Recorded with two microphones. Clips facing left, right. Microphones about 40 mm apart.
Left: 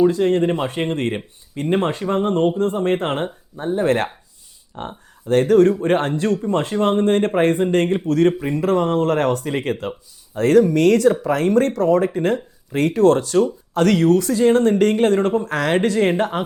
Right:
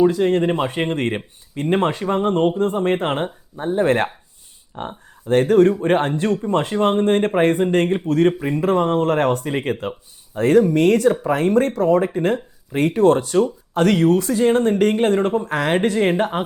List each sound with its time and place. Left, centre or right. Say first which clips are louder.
0.2 s speech: even; centre
3.8 s speech: right 1 dB; right
5.5 s speech: left 1 dB; right